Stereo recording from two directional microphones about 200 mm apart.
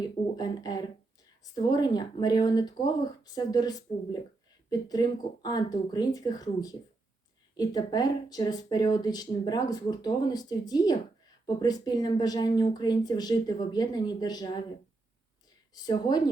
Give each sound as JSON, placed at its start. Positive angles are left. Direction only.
{"t": 0.0, "sound": "a sound", "side_deg": 20}
{"t": 1.7, "sound": "speech", "side_deg": 20}
{"t": 15.7, "sound": "speech", "side_deg": 20}